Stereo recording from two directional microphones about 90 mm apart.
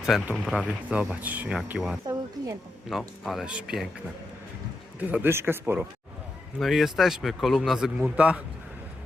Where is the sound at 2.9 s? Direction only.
Centre (ahead or behind).